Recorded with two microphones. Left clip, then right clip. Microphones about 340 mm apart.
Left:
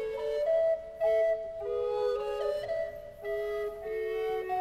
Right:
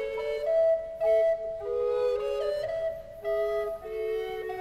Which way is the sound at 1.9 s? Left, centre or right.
Centre.